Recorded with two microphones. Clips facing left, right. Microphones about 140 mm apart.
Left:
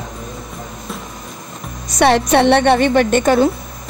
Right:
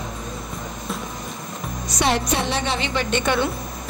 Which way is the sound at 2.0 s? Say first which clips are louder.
Left 10 dB; 65° left (ahead or behind).